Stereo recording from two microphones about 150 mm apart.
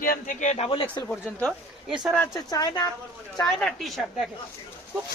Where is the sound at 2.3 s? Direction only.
25° left (ahead or behind).